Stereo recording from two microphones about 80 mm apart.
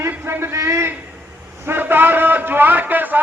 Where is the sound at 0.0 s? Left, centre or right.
Right.